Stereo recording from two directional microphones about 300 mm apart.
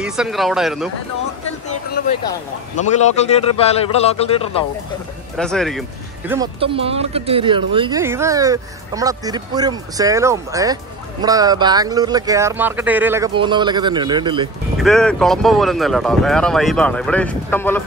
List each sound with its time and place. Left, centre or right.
0.0 s speech: centre
2.0 s a man's voice: left
5.4 s speech: centre
14.8 s speech: centre